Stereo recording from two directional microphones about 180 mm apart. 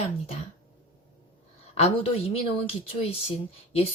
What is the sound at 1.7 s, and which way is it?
Speech, 35° left (ahead or behind).